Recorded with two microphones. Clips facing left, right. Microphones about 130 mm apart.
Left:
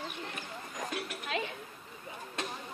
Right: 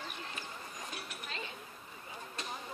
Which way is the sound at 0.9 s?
65° left (ahead or behind).